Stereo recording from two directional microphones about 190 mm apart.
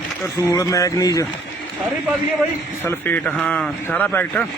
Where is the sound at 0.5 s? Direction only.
20° left (ahead or behind).